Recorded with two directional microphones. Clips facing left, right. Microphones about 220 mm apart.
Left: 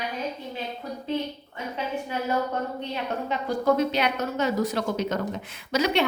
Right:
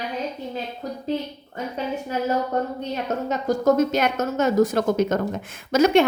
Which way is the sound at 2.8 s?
45° right (ahead or behind).